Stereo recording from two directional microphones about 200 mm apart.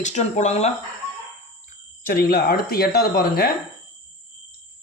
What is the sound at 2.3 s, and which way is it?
Speech, 50° left (ahead or behind).